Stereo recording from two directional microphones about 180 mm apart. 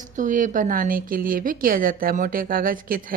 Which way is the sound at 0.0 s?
45° right (ahead or behind).